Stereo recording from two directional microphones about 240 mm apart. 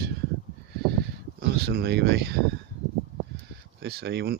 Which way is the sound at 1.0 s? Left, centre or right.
Right.